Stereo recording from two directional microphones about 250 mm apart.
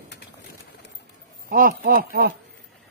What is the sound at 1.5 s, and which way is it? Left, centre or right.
Speech, right.